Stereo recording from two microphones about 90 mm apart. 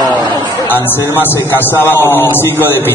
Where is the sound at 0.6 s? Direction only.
20° left (ahead or behind).